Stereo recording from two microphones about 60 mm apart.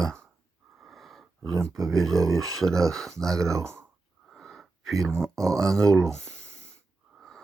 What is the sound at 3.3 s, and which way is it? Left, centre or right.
Speech, right.